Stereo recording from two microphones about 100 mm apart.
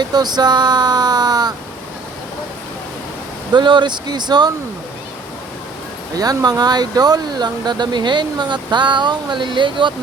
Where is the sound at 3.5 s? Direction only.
50° right (ahead or behind).